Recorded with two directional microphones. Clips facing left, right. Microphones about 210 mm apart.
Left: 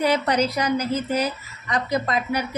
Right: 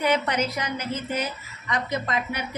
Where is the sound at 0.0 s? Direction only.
35° left (ahead or behind).